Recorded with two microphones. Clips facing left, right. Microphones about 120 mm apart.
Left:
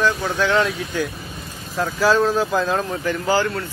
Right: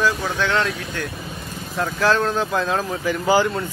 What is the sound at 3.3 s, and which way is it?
Speech, 15° right (ahead or behind).